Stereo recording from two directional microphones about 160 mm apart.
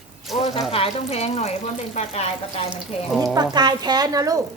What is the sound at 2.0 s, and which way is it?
Speech, 40° left (ahead or behind).